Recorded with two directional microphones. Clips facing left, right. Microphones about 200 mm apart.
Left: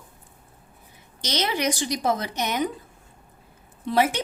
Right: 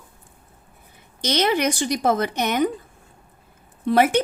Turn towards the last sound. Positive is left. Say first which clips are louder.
# right 5 dB
turn(degrees=-55)  # may be behind; listen again after turning